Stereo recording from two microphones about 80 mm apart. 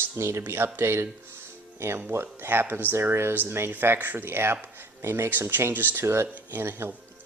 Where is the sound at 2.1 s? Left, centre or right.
Right.